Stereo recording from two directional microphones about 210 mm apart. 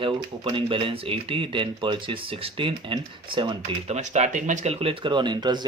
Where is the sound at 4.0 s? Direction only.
35° right (ahead or behind).